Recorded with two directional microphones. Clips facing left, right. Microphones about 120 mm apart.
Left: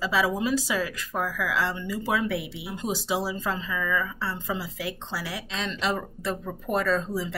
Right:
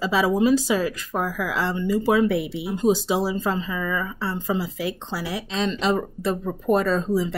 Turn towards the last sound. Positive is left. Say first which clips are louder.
# right 5 dB
turn(degrees=-25)  # may be behind; listen again after turning